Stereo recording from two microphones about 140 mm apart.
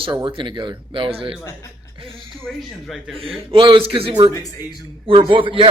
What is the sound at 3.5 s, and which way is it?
Speech, 35° right (ahead or behind).